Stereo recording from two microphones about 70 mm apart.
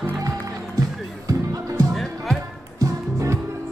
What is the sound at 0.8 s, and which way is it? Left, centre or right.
Music, right.